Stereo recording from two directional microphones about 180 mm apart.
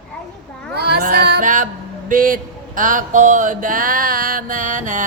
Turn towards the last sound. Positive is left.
turn(degrees=-45)  # may be behind; listen again after turning